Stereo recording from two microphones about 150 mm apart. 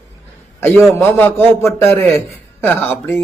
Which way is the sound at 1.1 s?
15° left (ahead or behind).